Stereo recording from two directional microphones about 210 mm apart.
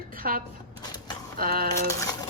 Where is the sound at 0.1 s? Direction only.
45° right (ahead or behind).